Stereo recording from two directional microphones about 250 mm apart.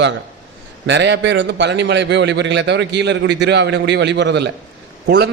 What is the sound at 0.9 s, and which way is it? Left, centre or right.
A man's voice, right.